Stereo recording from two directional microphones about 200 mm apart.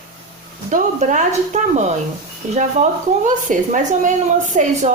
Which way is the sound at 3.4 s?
40° right (ahead or behind).